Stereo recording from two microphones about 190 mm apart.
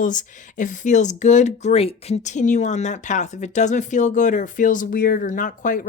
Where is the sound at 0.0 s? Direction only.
45° left (ahead or behind).